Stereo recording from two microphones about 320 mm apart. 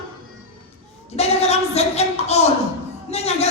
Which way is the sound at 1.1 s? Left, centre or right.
Centre.